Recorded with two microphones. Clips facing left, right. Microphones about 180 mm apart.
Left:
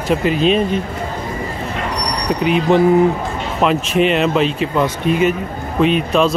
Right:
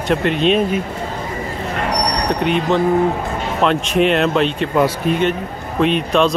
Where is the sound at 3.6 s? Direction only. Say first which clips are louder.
Left 1 dB; 5° left (ahead or behind).